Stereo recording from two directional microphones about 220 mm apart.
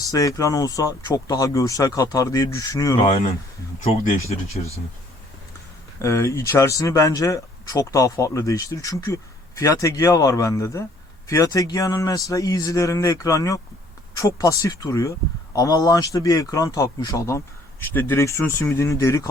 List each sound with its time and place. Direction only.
0.0 s speech: 15° left (ahead or behind)
4.0 s speech: 30° left (ahead or behind)
6.0 s speech: 15° left (ahead or behind)